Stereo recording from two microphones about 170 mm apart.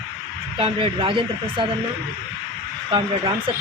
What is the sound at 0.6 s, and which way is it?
Speech, 30° right (ahead or behind).